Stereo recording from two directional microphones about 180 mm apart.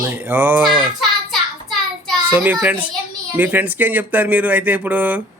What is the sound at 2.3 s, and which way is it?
Speech, 10° right (ahead or behind).